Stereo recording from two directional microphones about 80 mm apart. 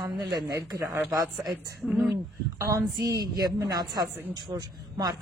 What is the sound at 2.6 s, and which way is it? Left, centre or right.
Speech, right.